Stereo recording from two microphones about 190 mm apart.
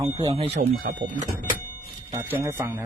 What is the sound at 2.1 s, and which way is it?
Speech, 15° right (ahead or behind).